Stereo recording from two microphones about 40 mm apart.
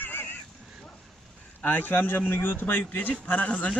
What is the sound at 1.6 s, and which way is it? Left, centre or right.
A man's voice, left.